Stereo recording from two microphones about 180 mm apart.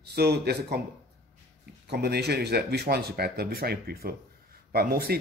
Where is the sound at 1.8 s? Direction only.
65° right (ahead or behind).